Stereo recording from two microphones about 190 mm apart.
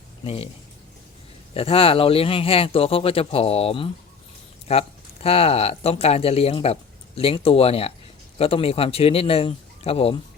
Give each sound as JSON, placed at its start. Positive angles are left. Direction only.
{"t": 1.5, "sound": "a man's voice", "side_deg": 30}